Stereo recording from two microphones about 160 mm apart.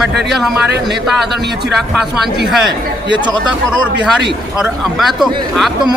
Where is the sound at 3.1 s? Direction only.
30° right (ahead or behind).